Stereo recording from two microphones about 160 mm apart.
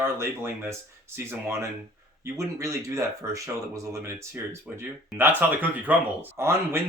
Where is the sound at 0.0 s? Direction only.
15° right (ahead or behind).